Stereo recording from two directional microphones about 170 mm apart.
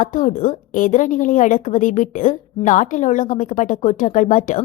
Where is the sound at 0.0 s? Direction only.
50° left (ahead or behind).